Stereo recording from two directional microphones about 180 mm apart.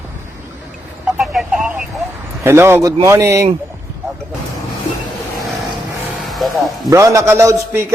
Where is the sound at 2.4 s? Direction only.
15° right (ahead or behind).